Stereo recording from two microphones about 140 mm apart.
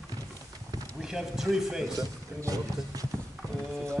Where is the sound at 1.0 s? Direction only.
5° right (ahead or behind).